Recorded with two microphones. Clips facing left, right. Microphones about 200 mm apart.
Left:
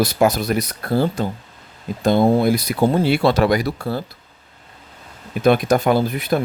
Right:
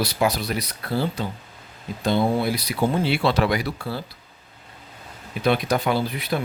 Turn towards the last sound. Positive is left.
turn(degrees=45)  # may be behind; listen again after turning